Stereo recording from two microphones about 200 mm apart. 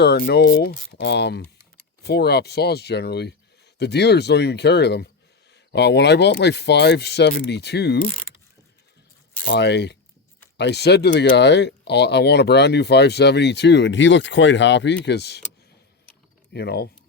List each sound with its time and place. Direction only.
0.0 s speech: 55° left (ahead or behind)
9.5 s speech: 60° left (ahead or behind)
16.5 s speech: 55° left (ahead or behind)